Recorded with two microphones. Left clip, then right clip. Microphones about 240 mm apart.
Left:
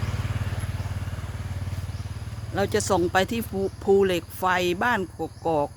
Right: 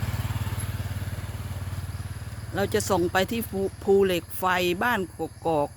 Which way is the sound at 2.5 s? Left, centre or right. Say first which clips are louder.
Left 1 dB; centre.